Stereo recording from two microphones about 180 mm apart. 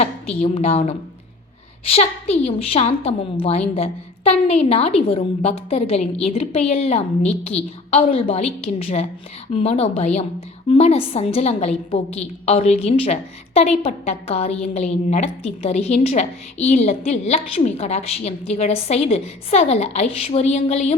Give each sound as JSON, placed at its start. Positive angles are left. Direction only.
{"t": 0.4, "sound": "a woman's voice", "side_deg": 35}